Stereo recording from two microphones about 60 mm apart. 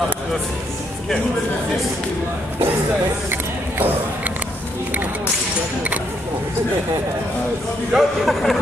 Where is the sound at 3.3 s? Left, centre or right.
Right.